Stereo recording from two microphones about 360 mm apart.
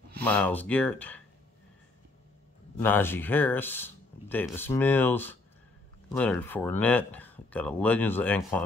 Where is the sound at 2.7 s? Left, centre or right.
Centre.